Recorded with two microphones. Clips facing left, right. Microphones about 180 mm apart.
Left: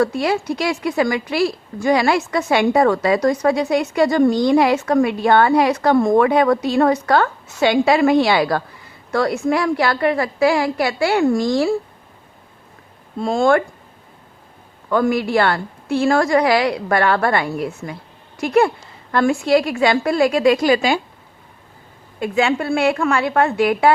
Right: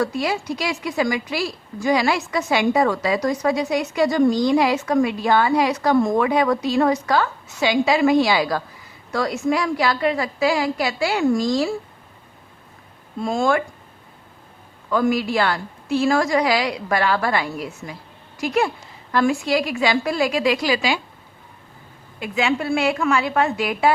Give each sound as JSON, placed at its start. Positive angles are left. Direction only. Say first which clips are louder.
{"t": 0.0, "sound": "a woman's voice", "louder": "left 4 dB", "side_deg": 55}
{"t": 13.3, "sound": "a woman's voice", "louder": "left 5 dB", "side_deg": 55}
{"t": 14.8, "sound": "a woman's voice", "louder": "left 2 dB", "side_deg": 60}
{"t": 22.2, "sound": "a woman's voice", "louder": "left 4 dB", "side_deg": 50}